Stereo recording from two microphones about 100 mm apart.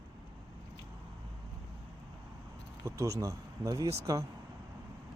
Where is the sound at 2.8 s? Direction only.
30° right (ahead or behind).